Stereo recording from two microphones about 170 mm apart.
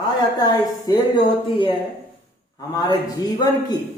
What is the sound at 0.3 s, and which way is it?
A woman's voice, 25° left (ahead or behind).